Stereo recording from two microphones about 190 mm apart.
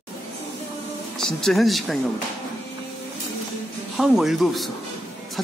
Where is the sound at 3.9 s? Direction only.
Centre (ahead or behind).